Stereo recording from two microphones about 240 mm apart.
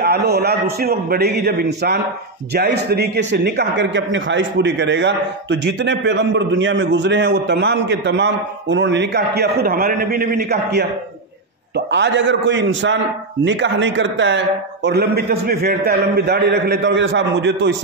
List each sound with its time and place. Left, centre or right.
0.0 s a man's voice: right